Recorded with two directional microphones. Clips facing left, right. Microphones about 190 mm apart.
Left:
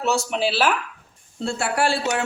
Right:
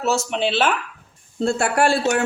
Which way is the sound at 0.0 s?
Centre (ahead or behind).